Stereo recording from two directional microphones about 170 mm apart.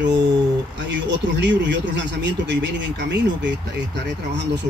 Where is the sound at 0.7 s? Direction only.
90° right.